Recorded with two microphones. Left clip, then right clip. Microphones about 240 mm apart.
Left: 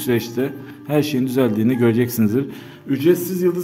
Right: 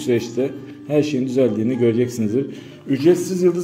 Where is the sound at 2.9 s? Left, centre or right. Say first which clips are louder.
Right 1 dB; centre.